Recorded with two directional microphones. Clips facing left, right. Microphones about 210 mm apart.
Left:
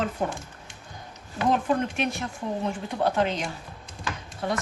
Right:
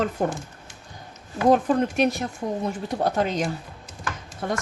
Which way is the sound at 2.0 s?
40° right (ahead or behind).